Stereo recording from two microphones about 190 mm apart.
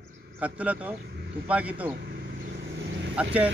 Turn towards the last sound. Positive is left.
turn(degrees=-70)  # may be behind; listen again after turning